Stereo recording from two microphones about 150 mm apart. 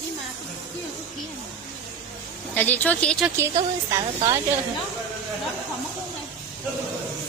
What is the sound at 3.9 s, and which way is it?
Speech, 20° right (ahead or behind).